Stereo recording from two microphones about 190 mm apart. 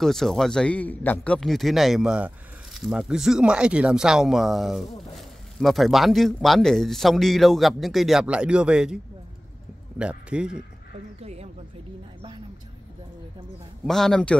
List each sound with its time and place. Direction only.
0.0 s speech: centre (ahead or behind)
11.1 s speech: 35° right (ahead or behind)
13.8 s speech: centre (ahead or behind)